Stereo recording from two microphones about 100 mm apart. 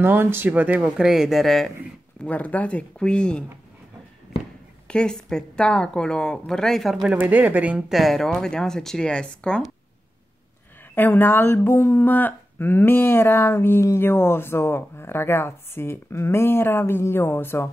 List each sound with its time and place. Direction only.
0.0 s speech: 20° right (ahead or behind); by 1.7 s centre (ahead or behind)
2.2 s speech: 15° left (ahead or behind)
4.8 s speech: 10° left (ahead or behind)
7.2 s speech: 15° right (ahead or behind)
7.9 s speech: centre (ahead or behind)
11.0 s speech: 20° left (ahead or behind)